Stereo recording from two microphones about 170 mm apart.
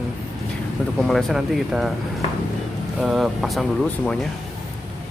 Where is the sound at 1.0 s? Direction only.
Centre (ahead or behind).